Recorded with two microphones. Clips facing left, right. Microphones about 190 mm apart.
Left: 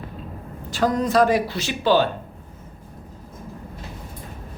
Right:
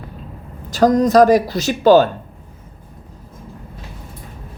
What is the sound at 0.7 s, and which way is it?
Speech, 40° right (ahead or behind).